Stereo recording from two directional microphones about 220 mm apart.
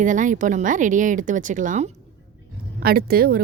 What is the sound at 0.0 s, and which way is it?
Speech, 35° right (ahead or behind).